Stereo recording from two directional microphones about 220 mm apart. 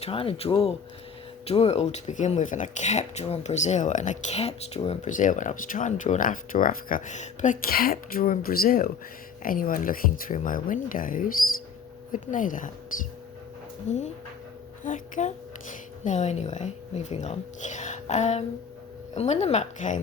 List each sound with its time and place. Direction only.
0.0 s speech: 25° left (ahead or behind)